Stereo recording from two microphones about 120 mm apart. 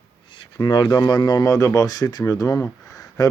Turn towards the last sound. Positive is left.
turn(degrees=30)  # may be behind; listen again after turning